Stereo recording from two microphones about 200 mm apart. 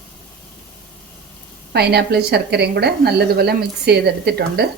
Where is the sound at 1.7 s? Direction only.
55° right (ahead or behind).